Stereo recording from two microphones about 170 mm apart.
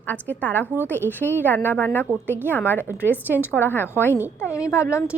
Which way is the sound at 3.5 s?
10° left (ahead or behind).